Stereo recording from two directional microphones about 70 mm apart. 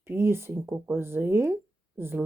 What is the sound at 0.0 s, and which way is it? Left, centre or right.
Speech, right.